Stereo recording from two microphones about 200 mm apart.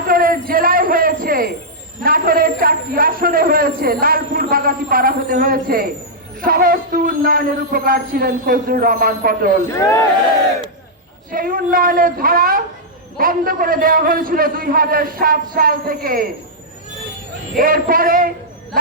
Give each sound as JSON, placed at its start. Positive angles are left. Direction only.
{"t": 0.1, "sound": "a sound", "side_deg": -45}
{"t": 2.0, "sound": "a man's voice", "side_deg": -45}
{"t": 9.7, "sound": "speech", "side_deg": 15}
{"t": 11.3, "sound": "a man's voice", "side_deg": -45}
{"t": 17.6, "sound": "a man's voice", "side_deg": -45}